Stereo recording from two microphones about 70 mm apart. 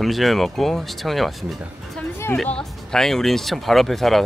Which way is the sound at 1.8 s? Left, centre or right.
Centre.